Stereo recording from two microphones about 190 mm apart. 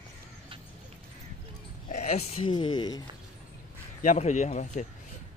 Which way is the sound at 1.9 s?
35° left (ahead or behind).